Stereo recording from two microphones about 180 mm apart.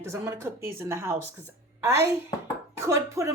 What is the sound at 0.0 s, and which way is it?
Speech, 15° right (ahead or behind).